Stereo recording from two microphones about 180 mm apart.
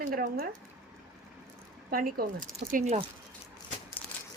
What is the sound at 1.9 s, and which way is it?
Speech, 55° right (ahead or behind).